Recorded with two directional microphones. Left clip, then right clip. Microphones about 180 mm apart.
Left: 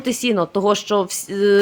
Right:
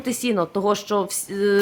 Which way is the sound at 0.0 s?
30° left (ahead or behind).